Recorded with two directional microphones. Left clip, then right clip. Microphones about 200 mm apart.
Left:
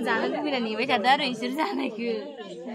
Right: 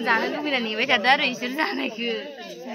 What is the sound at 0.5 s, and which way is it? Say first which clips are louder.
A woman's voice: right 6 dB; centre (ahead or behind).